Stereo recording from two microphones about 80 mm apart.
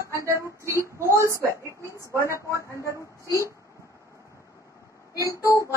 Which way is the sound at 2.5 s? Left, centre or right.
Left.